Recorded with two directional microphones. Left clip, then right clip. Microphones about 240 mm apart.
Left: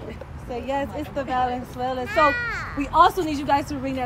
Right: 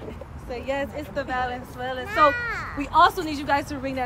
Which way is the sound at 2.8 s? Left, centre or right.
Centre.